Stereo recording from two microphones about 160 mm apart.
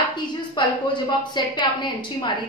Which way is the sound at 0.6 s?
30° left (ahead or behind).